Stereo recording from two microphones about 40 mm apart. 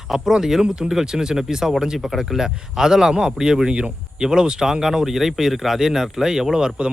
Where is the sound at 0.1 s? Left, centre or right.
Centre.